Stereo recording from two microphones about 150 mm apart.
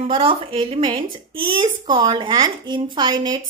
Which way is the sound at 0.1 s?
35° right (ahead or behind).